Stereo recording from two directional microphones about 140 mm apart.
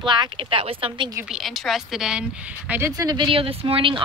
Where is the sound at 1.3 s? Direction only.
Centre (ahead or behind).